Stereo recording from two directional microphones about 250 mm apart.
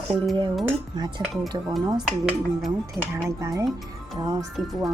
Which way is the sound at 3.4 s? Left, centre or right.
Centre.